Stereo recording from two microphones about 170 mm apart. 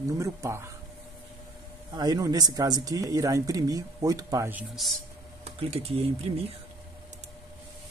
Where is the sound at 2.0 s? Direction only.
20° right (ahead or behind).